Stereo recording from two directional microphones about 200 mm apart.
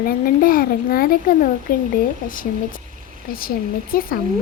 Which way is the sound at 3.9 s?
45° left (ahead or behind).